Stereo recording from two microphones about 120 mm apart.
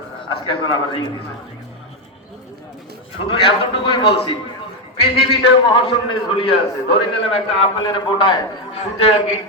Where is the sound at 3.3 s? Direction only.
45° left (ahead or behind).